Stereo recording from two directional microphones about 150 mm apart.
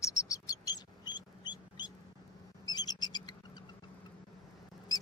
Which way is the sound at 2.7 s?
30° left (ahead or behind).